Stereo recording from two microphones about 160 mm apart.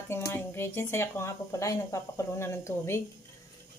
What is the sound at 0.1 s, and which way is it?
Speech, 15° left (ahead or behind).